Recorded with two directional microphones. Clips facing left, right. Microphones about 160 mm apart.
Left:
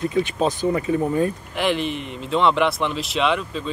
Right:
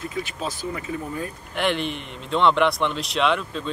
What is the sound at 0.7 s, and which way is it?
Speech, 35° left (ahead or behind).